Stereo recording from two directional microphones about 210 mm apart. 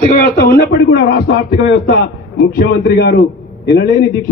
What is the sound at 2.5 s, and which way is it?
Speech, 50° left (ahead or behind).